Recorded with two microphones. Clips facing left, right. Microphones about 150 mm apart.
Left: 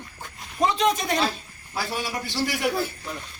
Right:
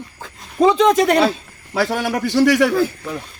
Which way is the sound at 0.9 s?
70° right (ahead or behind).